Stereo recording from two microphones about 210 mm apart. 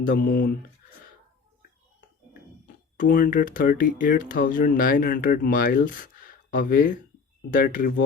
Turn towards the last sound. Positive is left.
turn(degrees=40)  # may be behind; listen again after turning